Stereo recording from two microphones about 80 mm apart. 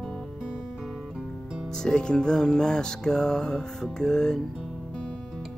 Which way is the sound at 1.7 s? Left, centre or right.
Centre.